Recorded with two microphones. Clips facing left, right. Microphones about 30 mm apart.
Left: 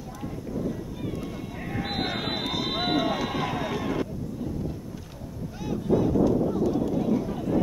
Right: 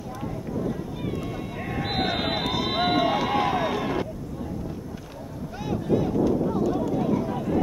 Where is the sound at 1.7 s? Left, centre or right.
Centre.